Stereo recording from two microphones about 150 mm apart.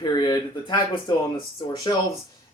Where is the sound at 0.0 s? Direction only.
25° left (ahead or behind).